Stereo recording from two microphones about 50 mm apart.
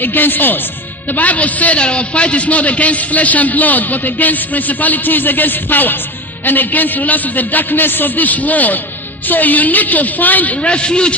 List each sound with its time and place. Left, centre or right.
0.0 s a man's voice: left